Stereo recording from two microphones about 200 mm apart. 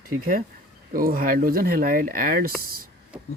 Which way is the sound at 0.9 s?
45° right (ahead or behind).